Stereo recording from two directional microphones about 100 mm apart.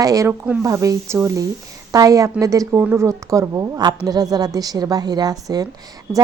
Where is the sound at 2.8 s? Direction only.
20° right (ahead or behind).